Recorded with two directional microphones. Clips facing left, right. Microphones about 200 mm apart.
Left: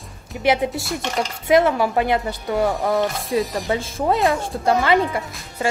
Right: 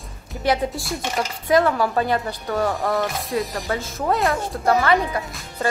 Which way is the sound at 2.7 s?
Centre (ahead or behind).